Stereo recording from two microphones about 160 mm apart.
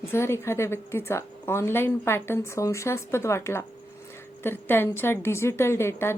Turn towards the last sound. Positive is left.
turn(degrees=15)  # may be behind; listen again after turning